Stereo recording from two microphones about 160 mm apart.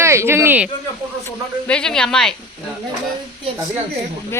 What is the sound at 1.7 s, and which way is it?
Speech, 5° left (ahead or behind).